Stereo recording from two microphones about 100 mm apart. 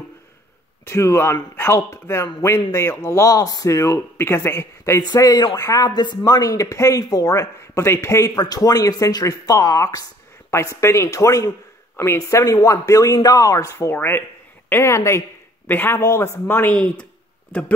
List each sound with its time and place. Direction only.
0.8 s speech: 30° left (ahead or behind)
5.0 s a man's voice: 45° left (ahead or behind)
5.6 s speech: 30° left (ahead or behind)
5.9 s speech: 45° left (ahead or behind); by 17.7 s 15° left (ahead or behind)